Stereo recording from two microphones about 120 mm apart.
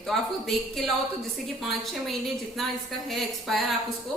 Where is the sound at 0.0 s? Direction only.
5° left (ahead or behind).